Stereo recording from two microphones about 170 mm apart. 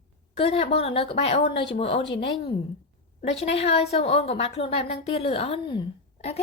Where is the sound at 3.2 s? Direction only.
35° left (ahead or behind).